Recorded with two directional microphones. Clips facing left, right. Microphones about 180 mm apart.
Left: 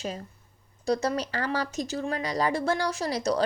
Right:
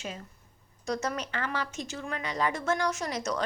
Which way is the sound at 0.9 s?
35° left (ahead or behind).